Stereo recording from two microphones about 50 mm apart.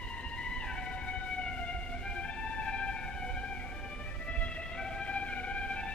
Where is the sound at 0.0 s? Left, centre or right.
Left.